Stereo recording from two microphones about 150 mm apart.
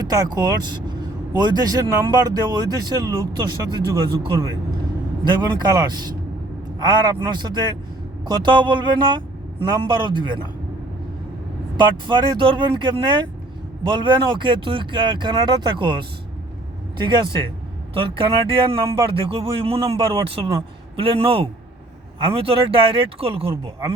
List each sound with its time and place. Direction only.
0.0 s speech: 25° right (ahead or behind)
11.8 s speech: 30° right (ahead or behind)